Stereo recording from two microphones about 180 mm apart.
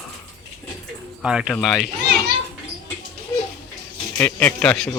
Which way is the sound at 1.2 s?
5° right (ahead or behind).